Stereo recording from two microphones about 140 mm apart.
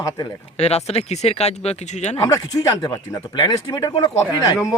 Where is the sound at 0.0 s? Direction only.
30° left (ahead or behind).